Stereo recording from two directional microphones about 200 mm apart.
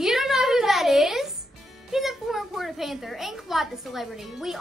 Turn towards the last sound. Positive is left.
turn(degrees=0)  # may be behind; listen again after turning